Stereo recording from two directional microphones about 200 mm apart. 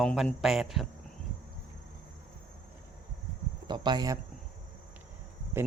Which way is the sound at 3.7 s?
20° right (ahead or behind).